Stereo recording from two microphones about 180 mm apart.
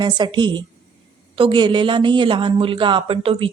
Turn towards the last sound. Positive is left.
turn(degrees=-30)  # may be behind; listen again after turning